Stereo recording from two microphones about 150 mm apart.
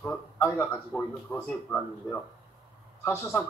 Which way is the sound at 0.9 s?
5° left (ahead or behind).